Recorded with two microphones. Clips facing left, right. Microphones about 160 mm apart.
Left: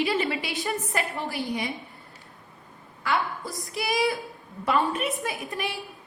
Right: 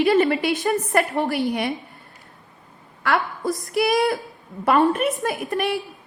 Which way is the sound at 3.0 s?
60° right (ahead or behind).